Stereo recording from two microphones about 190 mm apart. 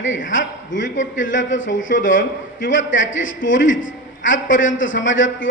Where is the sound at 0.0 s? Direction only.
80° left.